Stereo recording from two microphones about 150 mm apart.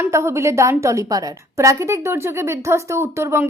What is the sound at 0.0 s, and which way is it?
A woman's voice, 20° right (ahead or behind).